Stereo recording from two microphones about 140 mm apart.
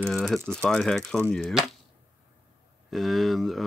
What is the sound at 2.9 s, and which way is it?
Speech, centre (ahead or behind).